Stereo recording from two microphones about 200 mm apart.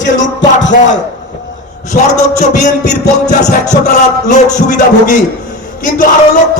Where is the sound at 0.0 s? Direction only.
65° left (ahead or behind).